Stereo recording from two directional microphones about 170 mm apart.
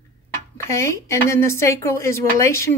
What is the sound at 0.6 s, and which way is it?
A woman's voice, 15° left (ahead or behind).